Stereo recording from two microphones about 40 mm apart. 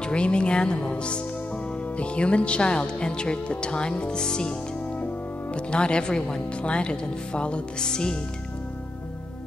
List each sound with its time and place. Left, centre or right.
0.0 s speech: left